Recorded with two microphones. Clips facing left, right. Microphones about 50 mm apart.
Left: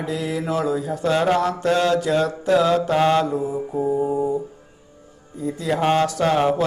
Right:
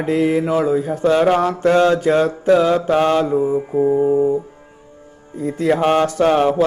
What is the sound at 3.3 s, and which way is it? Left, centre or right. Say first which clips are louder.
Speech: right 7 dB; right.